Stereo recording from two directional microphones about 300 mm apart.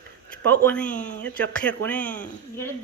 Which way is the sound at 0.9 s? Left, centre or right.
Left.